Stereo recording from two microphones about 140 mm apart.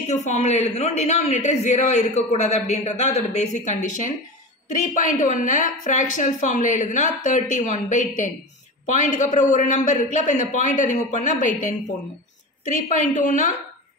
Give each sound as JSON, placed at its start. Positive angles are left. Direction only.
{"t": 0.1, "sound": "a man's voice", "side_deg": 55}